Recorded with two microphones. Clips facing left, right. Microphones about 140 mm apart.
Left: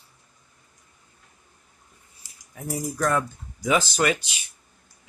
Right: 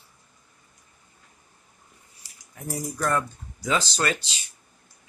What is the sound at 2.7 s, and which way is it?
Speech, centre (ahead or behind).